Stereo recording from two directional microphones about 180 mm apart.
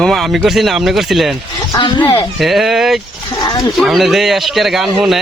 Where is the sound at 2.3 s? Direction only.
Centre (ahead or behind).